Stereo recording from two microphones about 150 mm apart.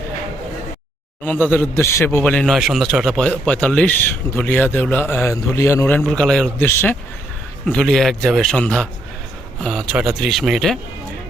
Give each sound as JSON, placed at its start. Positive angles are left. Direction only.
{"t": 1.2, "sound": "speech", "side_deg": 10}
{"t": 3.2, "sound": "speech", "side_deg": 10}
{"t": 6.1, "sound": "speech", "side_deg": 5}
{"t": 6.7, "sound": "speech", "side_deg": 15}
{"t": 7.7, "sound": "speech", "side_deg": 5}